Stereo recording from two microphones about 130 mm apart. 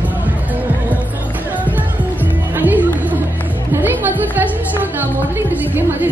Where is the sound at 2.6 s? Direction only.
15° right (ahead or behind).